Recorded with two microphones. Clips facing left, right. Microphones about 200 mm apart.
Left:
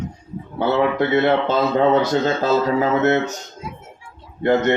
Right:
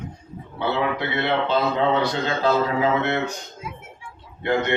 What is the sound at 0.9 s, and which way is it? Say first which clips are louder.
Speech: left 7 dB; 45° left (ahead or behind).